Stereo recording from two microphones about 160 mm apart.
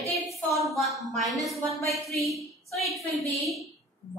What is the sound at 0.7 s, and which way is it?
A woman's voice, centre (ahead or behind).